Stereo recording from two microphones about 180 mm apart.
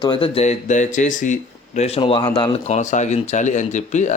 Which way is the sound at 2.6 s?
40° left (ahead or behind).